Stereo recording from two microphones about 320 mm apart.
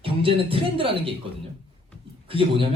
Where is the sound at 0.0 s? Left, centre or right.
Centre.